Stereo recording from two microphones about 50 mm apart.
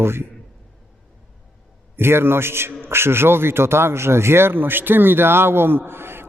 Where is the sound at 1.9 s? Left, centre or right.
Right.